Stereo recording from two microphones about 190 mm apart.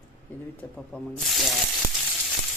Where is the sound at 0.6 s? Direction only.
10° left (ahead or behind).